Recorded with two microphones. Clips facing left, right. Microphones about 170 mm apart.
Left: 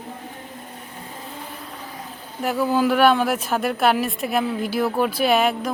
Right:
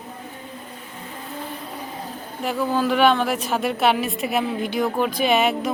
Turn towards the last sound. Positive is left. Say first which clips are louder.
# even
turn(degrees=0)  # may be behind; listen again after turning